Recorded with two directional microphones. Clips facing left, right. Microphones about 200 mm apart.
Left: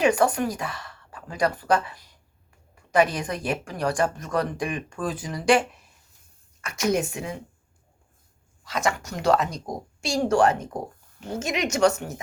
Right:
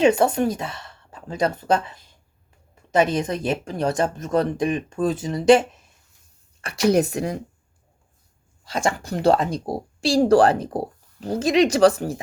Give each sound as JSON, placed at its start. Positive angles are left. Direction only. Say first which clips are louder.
{"t": 0.0, "sound": "speech", "louder": "right 4 dB", "side_deg": -25}
{"t": 8.6, "sound": "speech", "louder": "right 2 dB", "side_deg": -30}